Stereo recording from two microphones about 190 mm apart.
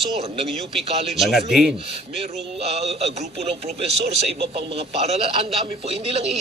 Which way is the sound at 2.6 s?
35° right (ahead or behind).